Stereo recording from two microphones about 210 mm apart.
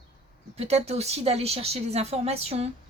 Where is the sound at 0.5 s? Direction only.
30° right (ahead or behind).